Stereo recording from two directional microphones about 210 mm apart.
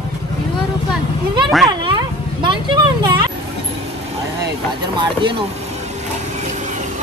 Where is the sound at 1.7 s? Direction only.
20° right (ahead or behind).